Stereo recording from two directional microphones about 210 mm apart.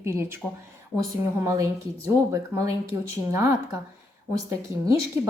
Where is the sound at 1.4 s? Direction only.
15° right (ahead or behind).